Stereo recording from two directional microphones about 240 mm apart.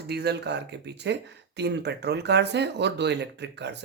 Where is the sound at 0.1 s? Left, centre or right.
Right.